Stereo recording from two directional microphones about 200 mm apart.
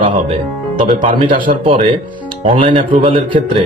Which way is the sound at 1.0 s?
40° right (ahead or behind).